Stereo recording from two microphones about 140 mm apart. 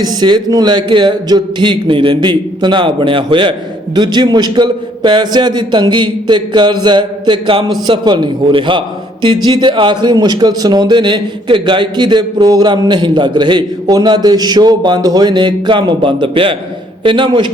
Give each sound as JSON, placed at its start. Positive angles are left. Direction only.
{"t": 0.0, "sound": "a man's voice", "side_deg": -30}